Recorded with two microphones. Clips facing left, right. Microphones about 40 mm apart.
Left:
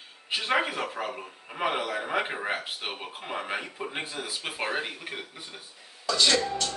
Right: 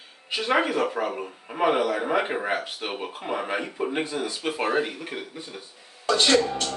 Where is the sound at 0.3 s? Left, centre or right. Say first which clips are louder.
Right 4 dB; centre.